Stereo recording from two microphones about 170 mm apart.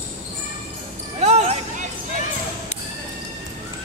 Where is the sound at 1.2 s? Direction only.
40° right (ahead or behind).